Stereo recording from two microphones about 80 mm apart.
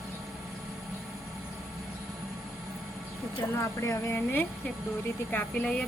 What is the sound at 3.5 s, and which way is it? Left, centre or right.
Speech, left.